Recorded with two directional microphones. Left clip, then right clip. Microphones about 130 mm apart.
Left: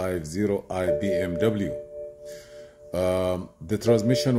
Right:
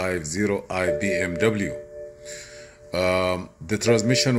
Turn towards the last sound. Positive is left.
turn(degrees=20)  # may be behind; listen again after turning